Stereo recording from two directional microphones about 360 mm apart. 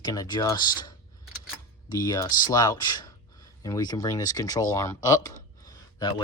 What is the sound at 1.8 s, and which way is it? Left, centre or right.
Speech, centre.